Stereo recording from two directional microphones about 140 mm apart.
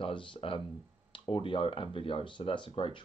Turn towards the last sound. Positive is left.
turn(degrees=40)  # may be behind; listen again after turning